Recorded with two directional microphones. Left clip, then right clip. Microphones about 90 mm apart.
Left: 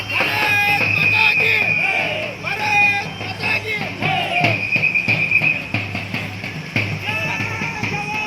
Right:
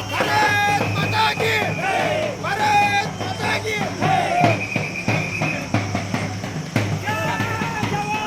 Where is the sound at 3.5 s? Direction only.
5° left (ahead or behind).